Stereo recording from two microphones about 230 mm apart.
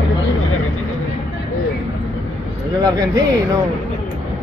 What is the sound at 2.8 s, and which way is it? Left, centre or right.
Speech, centre.